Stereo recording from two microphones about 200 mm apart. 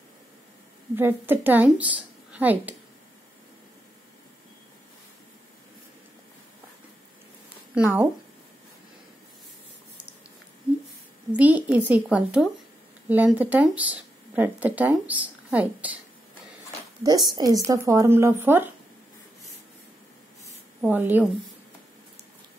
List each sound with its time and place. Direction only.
0.9 s speech: 10° right (ahead or behind)
7.7 s speech: 10° right (ahead or behind)
11.3 s speech: 5° right (ahead or behind)
17.0 s a woman's voice: 20° right (ahead or behind)
20.8 s speech: 10° right (ahead or behind)